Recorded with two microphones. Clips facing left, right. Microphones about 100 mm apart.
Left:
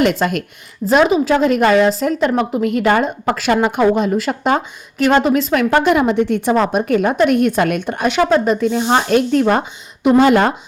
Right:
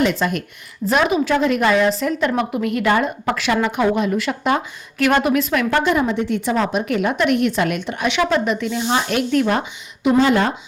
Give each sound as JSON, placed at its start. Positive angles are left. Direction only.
{"t": 0.0, "sound": "speech", "side_deg": 60}
{"t": 0.9, "sound": "a woman's voice", "side_deg": 35}
{"t": 5.0, "sound": "a woman's voice", "side_deg": 25}
{"t": 5.8, "sound": "a woman's voice", "side_deg": 70}
{"t": 6.1, "sound": "speech", "side_deg": 50}
{"t": 10.2, "sound": "speech", "side_deg": 60}